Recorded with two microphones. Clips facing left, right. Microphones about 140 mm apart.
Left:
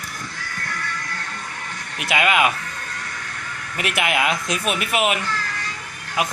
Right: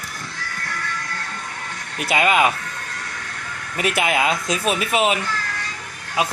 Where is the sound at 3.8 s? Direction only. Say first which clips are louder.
Right 2 dB; 35° right (ahead or behind).